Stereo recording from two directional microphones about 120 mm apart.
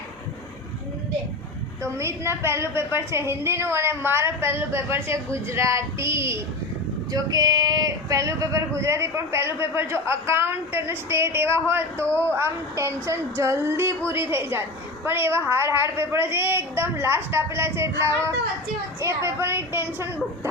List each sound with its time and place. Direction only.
1.8 s speech: 20° right (ahead or behind)